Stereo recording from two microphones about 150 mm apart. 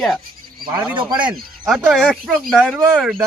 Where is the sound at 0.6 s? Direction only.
25° right (ahead or behind).